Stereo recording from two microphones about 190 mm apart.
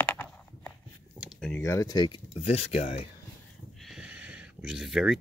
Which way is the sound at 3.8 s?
5° right (ahead or behind).